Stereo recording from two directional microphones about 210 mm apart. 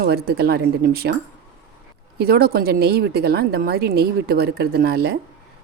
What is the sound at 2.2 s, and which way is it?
A woman's voice, 50° right (ahead or behind).